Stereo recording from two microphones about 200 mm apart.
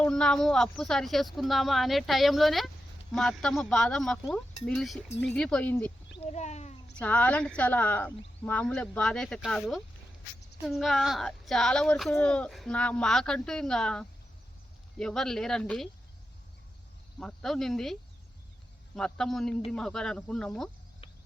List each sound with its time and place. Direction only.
0.0 s speech: 5° left (ahead or behind)
6.1 s speech: 35° left (ahead or behind)
7.0 s speech: 5° left (ahead or behind)
17.2 s speech: centre (ahead or behind)
18.9 s speech: 5° left (ahead or behind)